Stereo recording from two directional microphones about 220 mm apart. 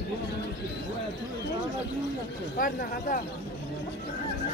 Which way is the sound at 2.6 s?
40° left (ahead or behind).